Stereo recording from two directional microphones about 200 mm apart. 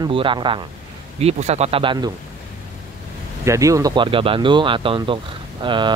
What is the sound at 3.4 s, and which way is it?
Speech, 15° right (ahead or behind).